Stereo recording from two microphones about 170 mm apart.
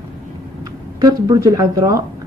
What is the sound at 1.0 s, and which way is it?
A woman's voice, 25° right (ahead or behind).